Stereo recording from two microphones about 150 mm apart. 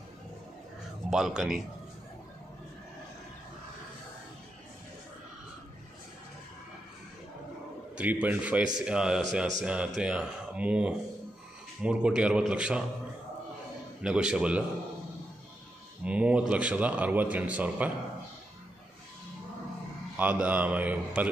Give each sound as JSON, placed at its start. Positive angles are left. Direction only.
{"t": 1.1, "sound": "speech", "side_deg": -5}
{"t": 7.9, "sound": "a man's voice", "side_deg": -10}
{"t": 14.0, "sound": "a man's voice", "side_deg": -5}
{"t": 16.0, "sound": "a man's voice", "side_deg": -10}
{"t": 20.2, "sound": "a man's voice", "side_deg": -10}